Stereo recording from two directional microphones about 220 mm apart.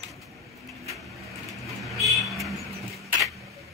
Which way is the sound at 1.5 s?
Centre (ahead or behind).